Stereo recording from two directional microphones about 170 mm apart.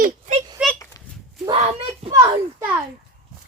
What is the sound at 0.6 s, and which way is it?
Speech, 10° right (ahead or behind).